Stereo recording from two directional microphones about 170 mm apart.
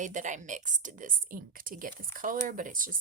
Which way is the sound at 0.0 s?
45° right (ahead or behind).